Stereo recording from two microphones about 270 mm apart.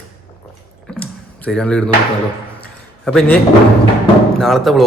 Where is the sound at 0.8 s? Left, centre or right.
Centre.